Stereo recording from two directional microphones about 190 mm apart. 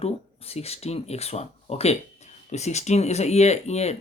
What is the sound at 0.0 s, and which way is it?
Speech, 30° left (ahead or behind).